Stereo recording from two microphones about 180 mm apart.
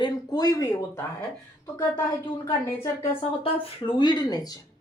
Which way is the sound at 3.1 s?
30° left (ahead or behind).